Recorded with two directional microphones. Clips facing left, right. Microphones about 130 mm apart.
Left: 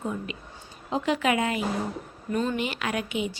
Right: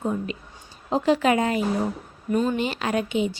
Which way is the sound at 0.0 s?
35° right (ahead or behind).